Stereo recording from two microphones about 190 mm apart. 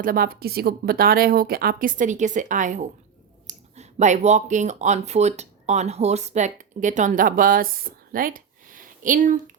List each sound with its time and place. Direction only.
0.0 s speech: 50° right (ahead or behind)